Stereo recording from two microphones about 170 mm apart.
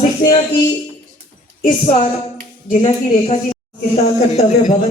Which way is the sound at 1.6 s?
40° left (ahead or behind).